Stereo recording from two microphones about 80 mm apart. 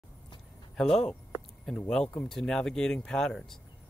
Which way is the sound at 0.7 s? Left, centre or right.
Centre.